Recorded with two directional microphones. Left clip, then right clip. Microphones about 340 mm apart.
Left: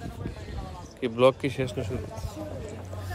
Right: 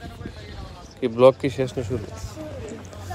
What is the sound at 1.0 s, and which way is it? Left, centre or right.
Speech, centre.